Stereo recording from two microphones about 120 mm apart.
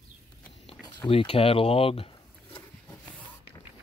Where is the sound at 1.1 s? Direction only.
50° left (ahead or behind).